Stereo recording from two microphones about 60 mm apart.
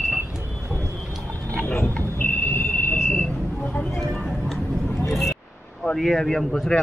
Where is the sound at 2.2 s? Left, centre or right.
Left.